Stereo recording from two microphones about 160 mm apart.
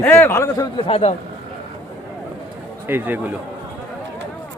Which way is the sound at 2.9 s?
10° right (ahead or behind).